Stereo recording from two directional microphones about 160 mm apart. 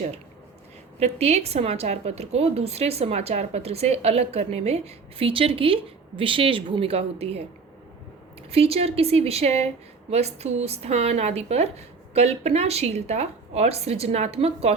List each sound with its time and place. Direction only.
0.9 s a woman's voice: 40° right (ahead or behind)
8.4 s a woman's voice: 35° right (ahead or behind)